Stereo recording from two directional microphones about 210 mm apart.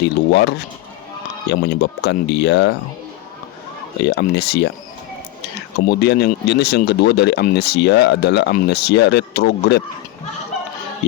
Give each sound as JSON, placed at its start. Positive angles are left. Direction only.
{"t": 0.0, "sound": "speech", "side_deg": 50}
{"t": 4.0, "sound": "speech", "side_deg": 50}
{"t": 5.9, "sound": "speech", "side_deg": 50}